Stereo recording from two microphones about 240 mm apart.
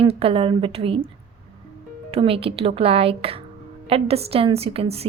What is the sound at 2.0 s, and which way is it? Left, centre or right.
A woman's voice, right.